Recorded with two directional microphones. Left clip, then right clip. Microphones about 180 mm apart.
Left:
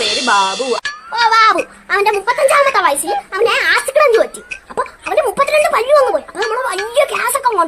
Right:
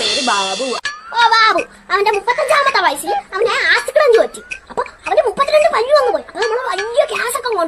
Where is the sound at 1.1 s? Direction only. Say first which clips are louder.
Left 1 dB; 15° left (ahead or behind).